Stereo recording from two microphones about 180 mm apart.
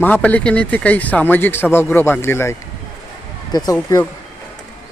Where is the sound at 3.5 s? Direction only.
20° left (ahead or behind).